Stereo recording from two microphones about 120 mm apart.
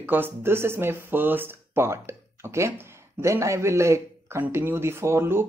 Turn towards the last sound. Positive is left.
turn(degrees=-20)  # may be behind; listen again after turning